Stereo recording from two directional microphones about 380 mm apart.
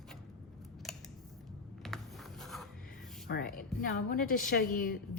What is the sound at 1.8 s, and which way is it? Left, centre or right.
Writing, centre.